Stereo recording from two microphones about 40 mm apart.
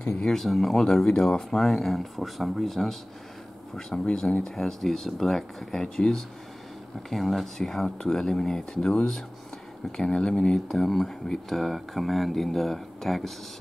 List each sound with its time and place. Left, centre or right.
0.1 s speech: centre
0.5 s speech: centre
3.9 s speech: centre
7.1 s speech: centre